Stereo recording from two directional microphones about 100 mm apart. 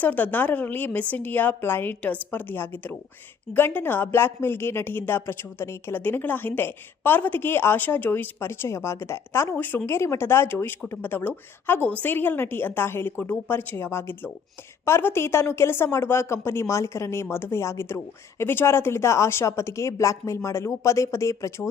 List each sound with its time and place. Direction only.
0.0 s a woman's voice: 15° left (ahead or behind)